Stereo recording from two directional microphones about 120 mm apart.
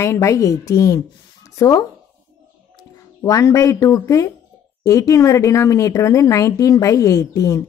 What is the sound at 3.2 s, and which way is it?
Speech, 25° left (ahead or behind).